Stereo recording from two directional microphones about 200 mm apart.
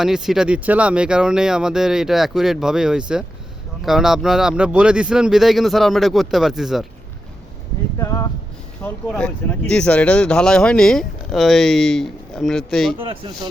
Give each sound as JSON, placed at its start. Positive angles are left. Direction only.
{"t": 0.0, "sound": "speech", "side_deg": 0}
{"t": 7.9, "sound": "a sound", "side_deg": 15}
{"t": 8.8, "sound": "speech", "side_deg": 5}
{"t": 13.1, "sound": "speech", "side_deg": -25}